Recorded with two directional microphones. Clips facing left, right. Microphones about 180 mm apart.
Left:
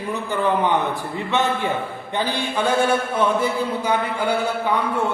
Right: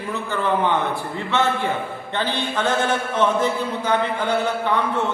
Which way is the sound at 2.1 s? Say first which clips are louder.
Left 1 dB; 10° left (ahead or behind).